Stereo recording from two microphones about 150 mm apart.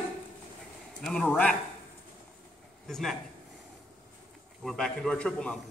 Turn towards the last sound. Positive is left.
turn(degrees=5)  # may be behind; listen again after turning